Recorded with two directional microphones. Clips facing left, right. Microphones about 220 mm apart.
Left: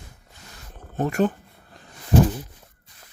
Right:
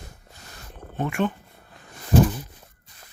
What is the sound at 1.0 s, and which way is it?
Speech, 40° left (ahead or behind).